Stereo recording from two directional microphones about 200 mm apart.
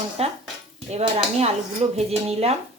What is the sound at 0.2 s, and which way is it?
Speech, 30° right (ahead or behind).